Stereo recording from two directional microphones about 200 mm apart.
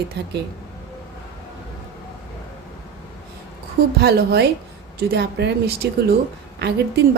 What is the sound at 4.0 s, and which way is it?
A woman's voice, 55° right (ahead or behind).